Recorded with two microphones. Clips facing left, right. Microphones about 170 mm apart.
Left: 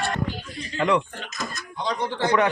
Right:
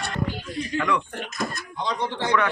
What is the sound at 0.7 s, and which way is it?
Speech, 25° left (ahead or behind).